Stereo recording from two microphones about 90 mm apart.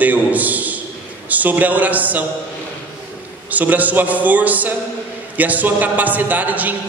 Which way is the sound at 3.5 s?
20° right (ahead or behind).